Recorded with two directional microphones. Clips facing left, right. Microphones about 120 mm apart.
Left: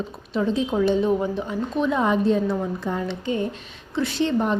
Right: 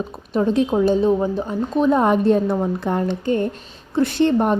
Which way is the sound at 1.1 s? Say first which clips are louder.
Right 4 dB; 30° right (ahead or behind).